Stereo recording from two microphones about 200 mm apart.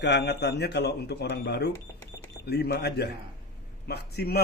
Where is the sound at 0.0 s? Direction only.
60° left (ahead or behind).